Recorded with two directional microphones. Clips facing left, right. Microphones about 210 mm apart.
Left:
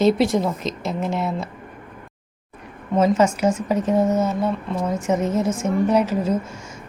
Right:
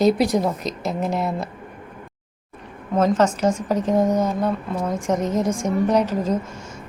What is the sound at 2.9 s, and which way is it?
A woman's voice, 10° left (ahead or behind).